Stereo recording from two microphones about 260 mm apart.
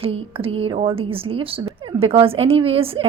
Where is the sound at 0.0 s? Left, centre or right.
Right.